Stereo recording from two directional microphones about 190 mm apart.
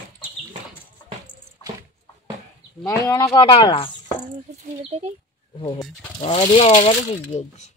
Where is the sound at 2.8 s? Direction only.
15° left (ahead or behind).